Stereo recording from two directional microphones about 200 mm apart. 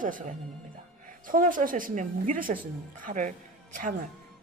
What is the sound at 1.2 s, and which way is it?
A woman's voice, 45° right (ahead or behind).